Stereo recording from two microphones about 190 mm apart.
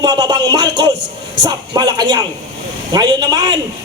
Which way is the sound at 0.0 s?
20° right (ahead or behind).